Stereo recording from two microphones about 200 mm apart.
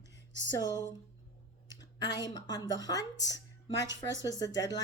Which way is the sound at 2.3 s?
20° left (ahead or behind).